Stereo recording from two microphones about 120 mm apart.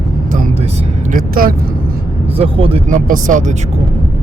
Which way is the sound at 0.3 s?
75° right (ahead or behind).